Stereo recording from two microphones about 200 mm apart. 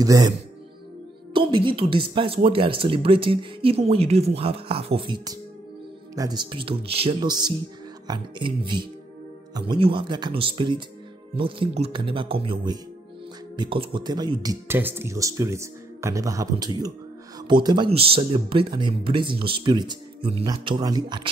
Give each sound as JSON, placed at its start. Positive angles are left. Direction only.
{"t": 0.0, "sound": "speech", "side_deg": -20}
{"t": 1.3, "sound": "speech", "side_deg": -25}